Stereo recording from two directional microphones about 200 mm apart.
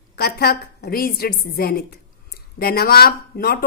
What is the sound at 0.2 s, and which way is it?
A woman's voice, 50° left (ahead or behind).